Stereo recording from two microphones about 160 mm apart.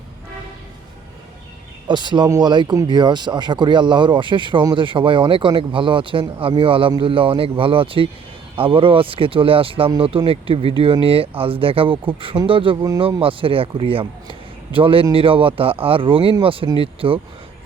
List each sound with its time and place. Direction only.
1.9 s speech: 30° right (ahead or behind)